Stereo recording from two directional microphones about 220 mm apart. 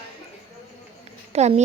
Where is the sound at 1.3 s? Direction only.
30° right (ahead or behind).